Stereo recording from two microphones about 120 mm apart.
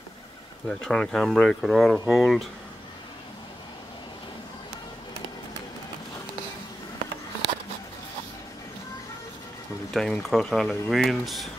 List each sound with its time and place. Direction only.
0.7 s speech: 5° left (ahead or behind)
9.8 s speech: 5° left (ahead or behind)